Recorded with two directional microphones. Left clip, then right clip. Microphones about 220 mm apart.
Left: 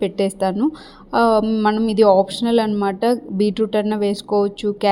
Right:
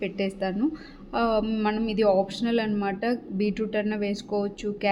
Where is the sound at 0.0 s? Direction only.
35° left (ahead or behind).